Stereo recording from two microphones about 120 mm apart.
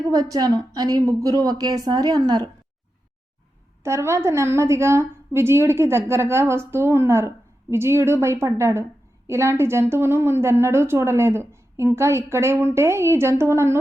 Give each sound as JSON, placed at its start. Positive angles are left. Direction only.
{"t": 0.1, "sound": "a woman's voice", "side_deg": -30}
{"t": 3.8, "sound": "a woman's voice", "side_deg": -20}